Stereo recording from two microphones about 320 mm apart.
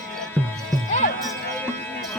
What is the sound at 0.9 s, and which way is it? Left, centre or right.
Music, left.